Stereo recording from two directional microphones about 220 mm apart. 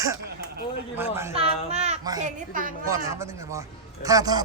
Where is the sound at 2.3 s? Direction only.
35° right (ahead or behind).